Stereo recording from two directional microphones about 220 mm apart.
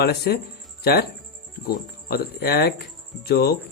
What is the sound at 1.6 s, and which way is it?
Speech, 45° left (ahead or behind).